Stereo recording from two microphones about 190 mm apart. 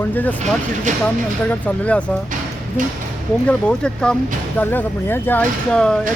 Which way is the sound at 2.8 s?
40° right (ahead or behind).